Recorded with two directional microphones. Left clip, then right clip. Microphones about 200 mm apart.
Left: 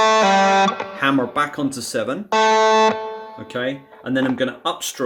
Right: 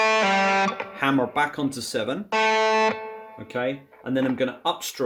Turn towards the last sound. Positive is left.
turn(degrees=5)  # may be behind; listen again after turning